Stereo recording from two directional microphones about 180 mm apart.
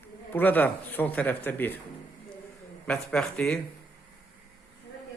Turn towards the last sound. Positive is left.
turn(degrees=5)  # may be behind; listen again after turning